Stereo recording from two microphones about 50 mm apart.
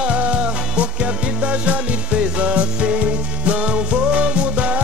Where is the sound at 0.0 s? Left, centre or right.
Right.